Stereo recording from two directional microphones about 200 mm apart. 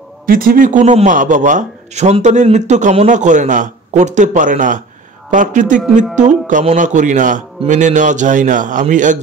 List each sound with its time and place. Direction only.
0.3 s a man's voice: 45° right (ahead or behind)